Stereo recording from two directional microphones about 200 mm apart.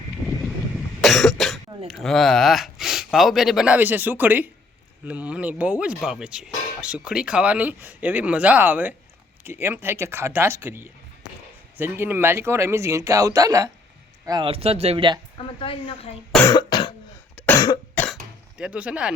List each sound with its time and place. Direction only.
0.2 s a sound: 5° right (ahead or behind)
1.0 s cough: centre (ahead or behind)
1.9 s speech: centre (ahead or behind); by 15.2 s 25° right (ahead or behind)
15.4 s a woman's voice: 25° left (ahead or behind)
16.5 s cough: 20° left (ahead or behind)
17.3 s cough: 5° left (ahead or behind)
17.6 s cough: 20° left (ahead or behind)
18.0 s cough: centre (ahead or behind)